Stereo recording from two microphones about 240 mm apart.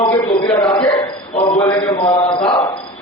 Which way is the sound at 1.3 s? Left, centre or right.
Left.